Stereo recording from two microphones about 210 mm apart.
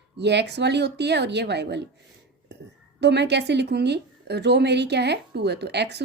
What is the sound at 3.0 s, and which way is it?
Speech, 55° right (ahead or behind).